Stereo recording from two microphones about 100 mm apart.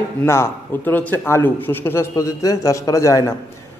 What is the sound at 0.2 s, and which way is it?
Speech, 25° left (ahead or behind).